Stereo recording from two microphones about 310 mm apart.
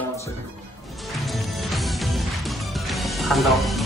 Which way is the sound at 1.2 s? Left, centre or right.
Centre.